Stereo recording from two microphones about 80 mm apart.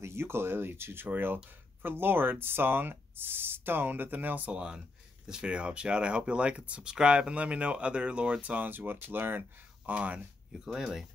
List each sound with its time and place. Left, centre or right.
0.0 s speech: right; by 10.2 s centre
10.6 s speech: centre